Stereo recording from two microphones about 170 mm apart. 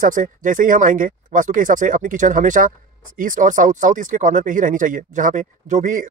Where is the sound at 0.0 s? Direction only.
50° right (ahead or behind).